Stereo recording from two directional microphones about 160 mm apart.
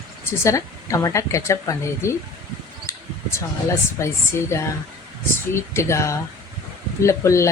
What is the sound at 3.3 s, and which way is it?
Speech, 15° left (ahead or behind).